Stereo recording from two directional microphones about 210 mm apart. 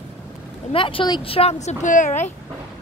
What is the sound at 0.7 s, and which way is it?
Speech, 25° left (ahead or behind).